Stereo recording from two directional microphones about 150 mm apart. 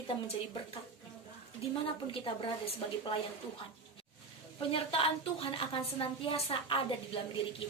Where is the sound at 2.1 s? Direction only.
35° left (ahead or behind).